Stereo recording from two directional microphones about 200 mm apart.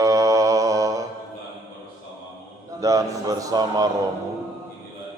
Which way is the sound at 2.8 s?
15° right (ahead or behind).